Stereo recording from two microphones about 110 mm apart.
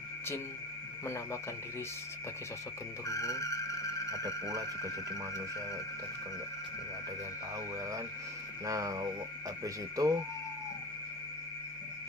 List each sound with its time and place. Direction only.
1.0 s speech: 25° left (ahead or behind)
3.1 s vehicle: 30° left (ahead or behind)
8.6 s speech: 30° right (ahead or behind)